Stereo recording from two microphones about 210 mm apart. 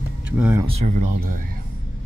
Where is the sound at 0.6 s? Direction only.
30° right (ahead or behind).